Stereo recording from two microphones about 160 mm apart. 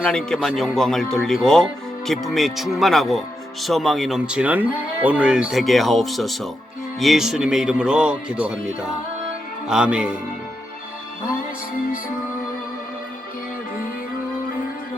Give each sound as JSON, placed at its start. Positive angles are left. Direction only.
{"t": 0.0, "sound": "speech", "side_deg": 5}